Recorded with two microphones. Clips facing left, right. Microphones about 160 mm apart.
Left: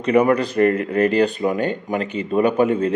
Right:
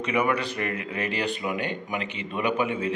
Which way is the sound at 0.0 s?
40° left (ahead or behind).